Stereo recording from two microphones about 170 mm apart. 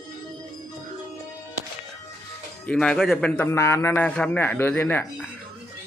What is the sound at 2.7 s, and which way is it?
Speech, 5° left (ahead or behind).